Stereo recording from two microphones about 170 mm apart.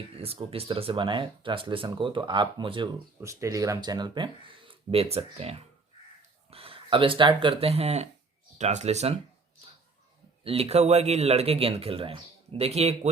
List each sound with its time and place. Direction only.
0.2 s speech: 35° right (ahead or behind)
3.2 s speech: 15° right (ahead or behind); by 9.1 s 40° right (ahead or behind)
10.4 s speech: 35° right (ahead or behind)